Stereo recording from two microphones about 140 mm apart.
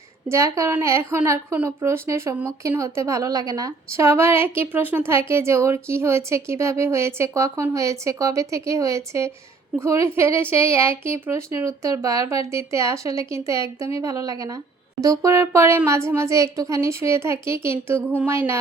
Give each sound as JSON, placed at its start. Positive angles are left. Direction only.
{"t": 0.3, "sound": "a woman's voice", "side_deg": -20}